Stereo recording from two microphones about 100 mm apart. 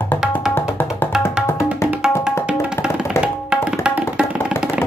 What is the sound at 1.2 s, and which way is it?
Music, 30° left (ahead or behind).